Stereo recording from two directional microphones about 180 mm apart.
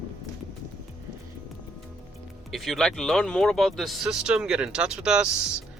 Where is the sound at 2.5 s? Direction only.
Centre (ahead or behind).